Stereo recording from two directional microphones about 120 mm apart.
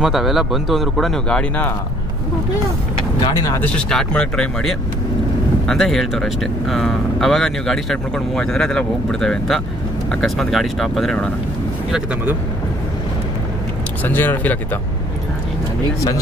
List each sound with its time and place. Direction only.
0.0 s speech: centre (ahead or behind)
3.2 s speech: 35° left (ahead or behind)
3.5 s speech: 10° left (ahead or behind)
14.0 s speech: 15° left (ahead or behind)